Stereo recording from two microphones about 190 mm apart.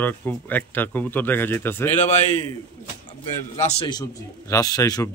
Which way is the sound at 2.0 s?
40° left (ahead or behind).